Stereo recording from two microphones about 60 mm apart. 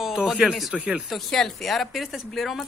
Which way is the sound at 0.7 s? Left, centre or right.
Right.